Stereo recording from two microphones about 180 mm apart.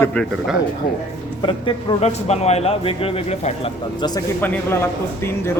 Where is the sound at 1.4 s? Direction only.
30° left (ahead or behind).